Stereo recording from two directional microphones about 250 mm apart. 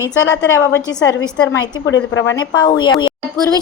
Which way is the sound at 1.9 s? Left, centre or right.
Left.